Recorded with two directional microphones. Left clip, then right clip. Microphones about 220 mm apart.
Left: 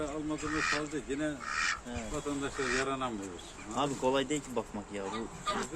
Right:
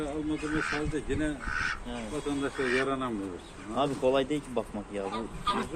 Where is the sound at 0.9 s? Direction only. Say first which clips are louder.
Right 3 dB; 50° left (ahead or behind).